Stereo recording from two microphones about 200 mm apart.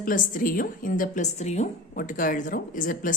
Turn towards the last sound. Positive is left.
turn(degrees=40)  # may be behind; listen again after turning